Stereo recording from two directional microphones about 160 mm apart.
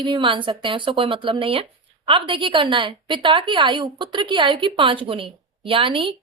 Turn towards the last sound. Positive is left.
turn(degrees=-35)  # may be behind; listen again after turning